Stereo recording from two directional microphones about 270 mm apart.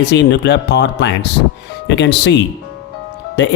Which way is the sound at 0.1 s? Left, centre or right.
Left.